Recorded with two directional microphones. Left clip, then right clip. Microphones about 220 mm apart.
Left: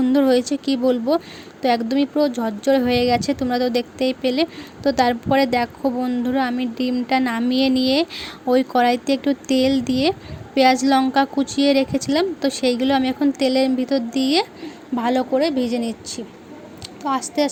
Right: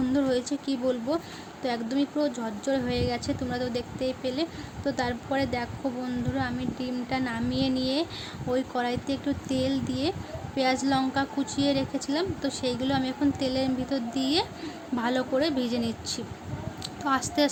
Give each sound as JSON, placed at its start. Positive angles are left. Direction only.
{"t": 0.0, "sound": "speech", "side_deg": 35}